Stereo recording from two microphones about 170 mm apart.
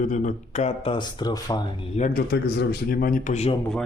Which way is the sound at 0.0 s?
45° left (ahead or behind).